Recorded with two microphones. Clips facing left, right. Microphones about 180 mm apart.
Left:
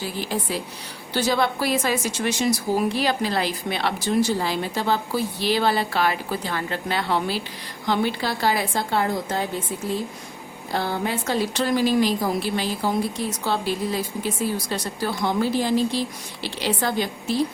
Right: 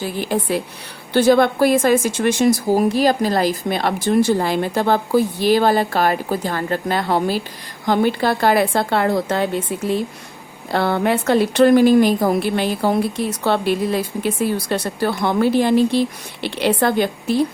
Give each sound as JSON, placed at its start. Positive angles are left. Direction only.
{"t": 0.0, "sound": "a woman's voice", "side_deg": -55}